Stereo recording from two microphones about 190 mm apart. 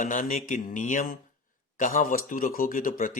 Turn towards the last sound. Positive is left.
turn(degrees=45)  # may be behind; listen again after turning